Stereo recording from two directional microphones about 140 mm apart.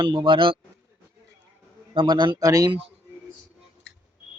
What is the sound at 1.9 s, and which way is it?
Speech, 35° right (ahead or behind).